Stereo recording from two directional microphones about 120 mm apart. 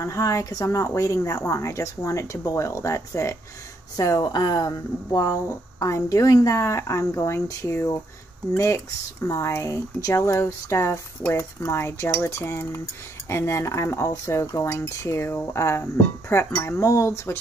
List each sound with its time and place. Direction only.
0.0 s speech: 25° left (ahead or behind)